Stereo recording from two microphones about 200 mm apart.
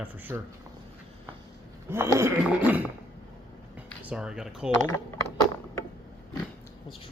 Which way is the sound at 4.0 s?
5° right (ahead or behind).